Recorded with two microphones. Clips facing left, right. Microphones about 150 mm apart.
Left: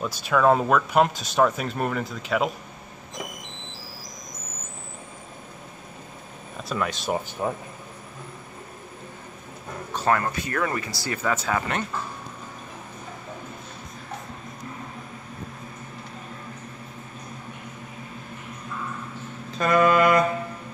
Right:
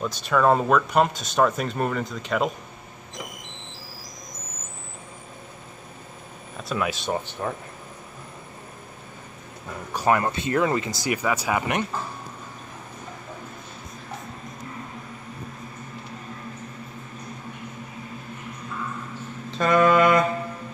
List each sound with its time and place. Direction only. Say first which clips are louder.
0.0 s speech: even; 5° left (ahead or behind)
6.7 s speech: right 1 dB; centre (ahead or behind)
7.1 s speech: left 1 dB; 10° left (ahead or behind)
9.9 s speech: right 2 dB; 15° right (ahead or behind)
19.5 s mantra: right 1 dB; centre (ahead or behind)